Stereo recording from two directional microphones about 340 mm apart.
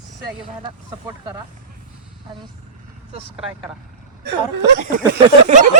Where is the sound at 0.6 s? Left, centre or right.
Centre.